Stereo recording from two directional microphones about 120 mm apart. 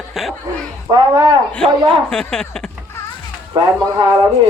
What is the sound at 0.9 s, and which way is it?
Speech, 35° right (ahead or behind).